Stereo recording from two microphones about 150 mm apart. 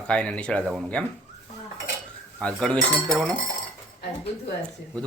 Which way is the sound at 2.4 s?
5° left (ahead or behind).